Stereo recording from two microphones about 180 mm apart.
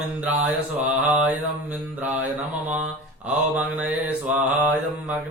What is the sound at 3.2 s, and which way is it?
Mantra, 10° right (ahead or behind).